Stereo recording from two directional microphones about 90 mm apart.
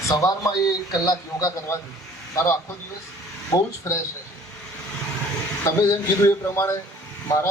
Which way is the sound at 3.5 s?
35° left (ahead or behind).